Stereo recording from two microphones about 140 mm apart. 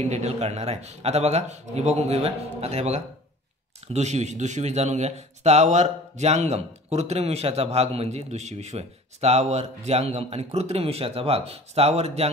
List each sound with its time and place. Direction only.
0.0 s a man's voice: 50° right (ahead or behind)